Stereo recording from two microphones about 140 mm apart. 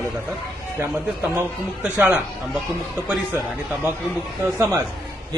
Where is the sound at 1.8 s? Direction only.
15° right (ahead or behind).